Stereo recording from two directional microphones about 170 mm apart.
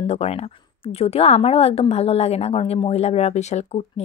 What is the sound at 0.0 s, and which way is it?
A woman's voice, 35° left (ahead or behind).